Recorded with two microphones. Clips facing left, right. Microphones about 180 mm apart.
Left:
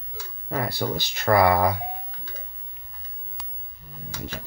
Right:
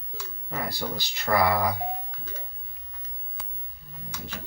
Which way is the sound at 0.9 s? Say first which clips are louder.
Left 4 dB; 50° left (ahead or behind).